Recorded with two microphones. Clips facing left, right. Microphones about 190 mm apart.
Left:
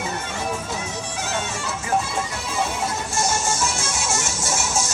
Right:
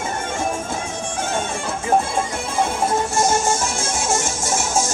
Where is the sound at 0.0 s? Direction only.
50° right (ahead or behind).